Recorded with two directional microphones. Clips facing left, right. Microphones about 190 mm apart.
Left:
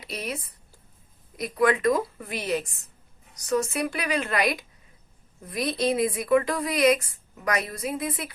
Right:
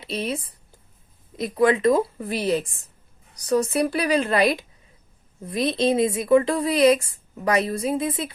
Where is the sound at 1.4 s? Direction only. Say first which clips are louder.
Right 4 dB; 25° right (ahead or behind).